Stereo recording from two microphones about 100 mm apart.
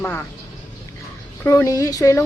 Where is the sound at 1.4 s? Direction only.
25° left (ahead or behind).